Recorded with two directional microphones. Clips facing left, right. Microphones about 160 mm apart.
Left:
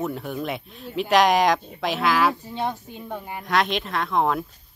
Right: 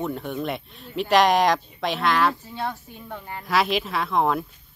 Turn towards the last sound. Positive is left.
turn(degrees=0)  # may be behind; listen again after turning